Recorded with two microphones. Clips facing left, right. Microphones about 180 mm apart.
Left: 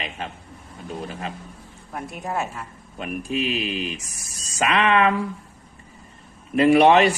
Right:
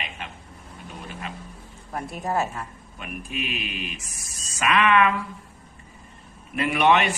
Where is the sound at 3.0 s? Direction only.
35° left (ahead or behind).